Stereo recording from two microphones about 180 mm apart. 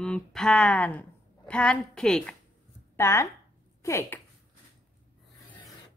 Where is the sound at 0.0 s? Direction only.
5° left (ahead or behind).